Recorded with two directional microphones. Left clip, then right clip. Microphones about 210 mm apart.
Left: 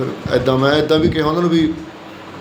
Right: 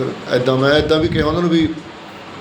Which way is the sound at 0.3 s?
20° left (ahead or behind).